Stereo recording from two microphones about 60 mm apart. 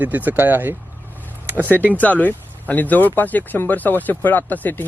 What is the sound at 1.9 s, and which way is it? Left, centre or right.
Speech, left.